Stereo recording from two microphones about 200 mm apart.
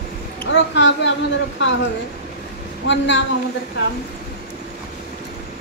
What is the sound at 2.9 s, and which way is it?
Speech, 65° left (ahead or behind).